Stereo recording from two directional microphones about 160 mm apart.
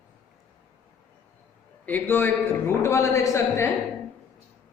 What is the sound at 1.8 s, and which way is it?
A man's voice, 10° left (ahead or behind).